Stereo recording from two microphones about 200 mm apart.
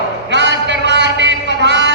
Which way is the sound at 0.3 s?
60° right (ahead or behind).